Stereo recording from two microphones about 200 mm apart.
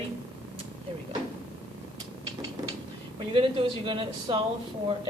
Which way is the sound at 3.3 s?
25° right (ahead or behind).